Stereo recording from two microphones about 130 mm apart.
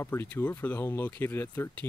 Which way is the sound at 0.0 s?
20° left (ahead or behind).